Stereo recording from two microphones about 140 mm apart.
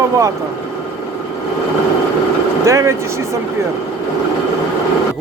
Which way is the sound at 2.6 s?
20° right (ahead or behind).